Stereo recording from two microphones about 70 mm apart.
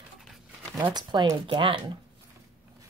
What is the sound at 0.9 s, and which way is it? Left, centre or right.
Speech, right.